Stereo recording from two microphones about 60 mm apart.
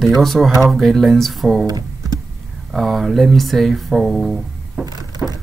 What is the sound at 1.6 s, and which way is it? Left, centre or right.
Computer keyboard, right.